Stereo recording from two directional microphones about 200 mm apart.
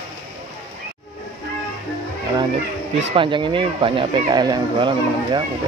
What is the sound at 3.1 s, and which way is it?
Speech, 25° right (ahead or behind).